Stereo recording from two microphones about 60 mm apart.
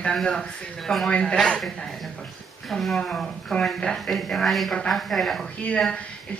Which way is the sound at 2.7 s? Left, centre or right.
Centre.